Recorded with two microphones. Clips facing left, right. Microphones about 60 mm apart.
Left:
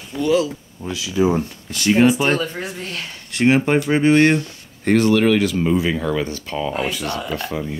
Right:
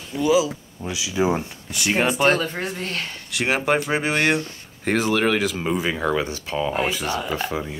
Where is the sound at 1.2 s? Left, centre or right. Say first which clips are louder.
Left 4 dB; right.